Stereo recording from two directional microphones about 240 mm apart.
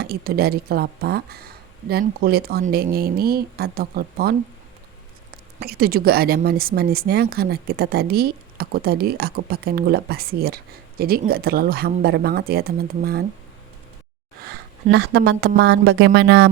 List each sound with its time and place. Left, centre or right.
0.0 s speech: right
5.5 s speech: right
14.8 s speech: right